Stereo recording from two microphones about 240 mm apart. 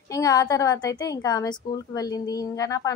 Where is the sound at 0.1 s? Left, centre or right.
Centre.